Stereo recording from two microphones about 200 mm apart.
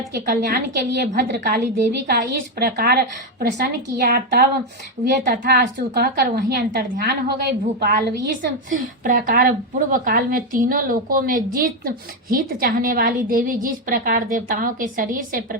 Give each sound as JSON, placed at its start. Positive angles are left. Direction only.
{"t": 0.1, "sound": "a woman's voice", "side_deg": -50}
{"t": 9.0, "sound": "a woman's voice", "side_deg": -45}